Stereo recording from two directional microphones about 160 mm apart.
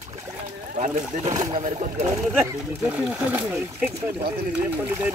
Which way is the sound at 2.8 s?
10° right (ahead or behind).